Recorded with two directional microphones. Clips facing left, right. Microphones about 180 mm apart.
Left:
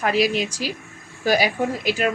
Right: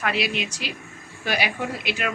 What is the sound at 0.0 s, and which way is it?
Speech, 40° left (ahead or behind).